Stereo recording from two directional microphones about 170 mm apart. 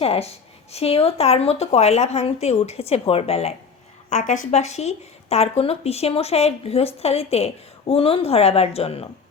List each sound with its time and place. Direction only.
0.0 s speech: 35° left (ahead or behind)